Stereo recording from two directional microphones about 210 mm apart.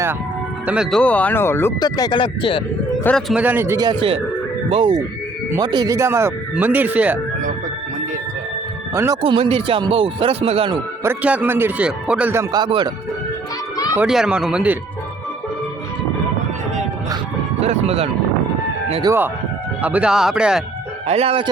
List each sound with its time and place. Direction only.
0.7 s speech: centre (ahead or behind); by 2.6 s 25° left (ahead or behind)
3.0 s speech: 5° left (ahead or behind)
9.2 s speech: 25° right (ahead or behind)
11.0 s speech: 10° right (ahead or behind)
13.9 s speech: 5° right (ahead or behind)
17.6 s speech: 30° right (ahead or behind)
19.8 s speech: 5° right (ahead or behind)
21.1 s speech: 30° right (ahead or behind)